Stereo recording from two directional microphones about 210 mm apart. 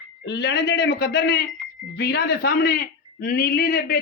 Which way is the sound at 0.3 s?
55° left (ahead or behind).